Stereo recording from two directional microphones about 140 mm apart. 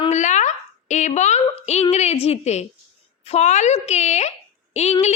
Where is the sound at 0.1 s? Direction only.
60° left (ahead or behind).